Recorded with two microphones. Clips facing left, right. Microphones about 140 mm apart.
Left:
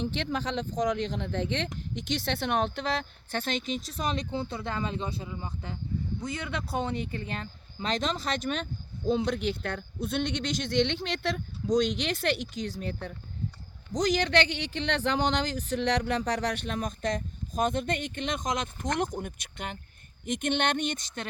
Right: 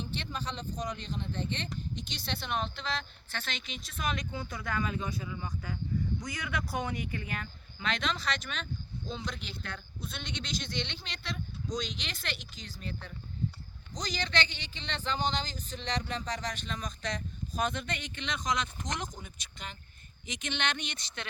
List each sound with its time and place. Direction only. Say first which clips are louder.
0.0 s speech: left 7 dB; 90° left; by 13.1 s 55° left (ahead or behind)
13.9 s speech: left 9 dB; 75° left (ahead or behind); by 21.2 s 45° left (ahead or behind)